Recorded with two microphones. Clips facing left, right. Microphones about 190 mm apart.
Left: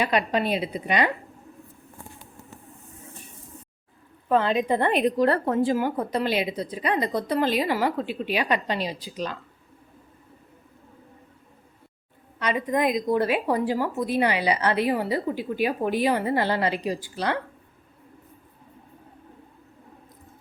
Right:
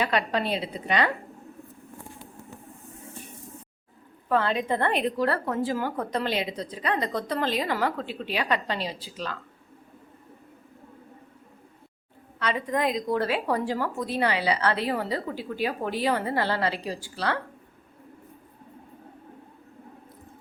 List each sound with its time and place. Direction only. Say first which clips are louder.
0.0 s a woman's voice: left 2 dB; 15° left (ahead or behind)
4.3 s a woman's voice: left 3 dB; 20° left (ahead or behind)
5.7 s a woman's voice: left 4 dB; 10° left (ahead or behind)
12.4 s a woman's voice: left 3 dB; 15° left (ahead or behind)